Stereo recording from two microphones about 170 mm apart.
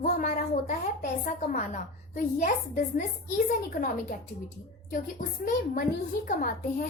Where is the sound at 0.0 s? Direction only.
45° left (ahead or behind).